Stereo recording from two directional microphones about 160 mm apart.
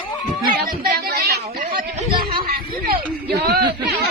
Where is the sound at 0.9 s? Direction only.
75° right (ahead or behind).